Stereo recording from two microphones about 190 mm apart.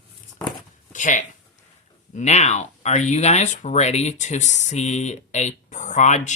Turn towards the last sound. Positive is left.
turn(degrees=40)  # may be behind; listen again after turning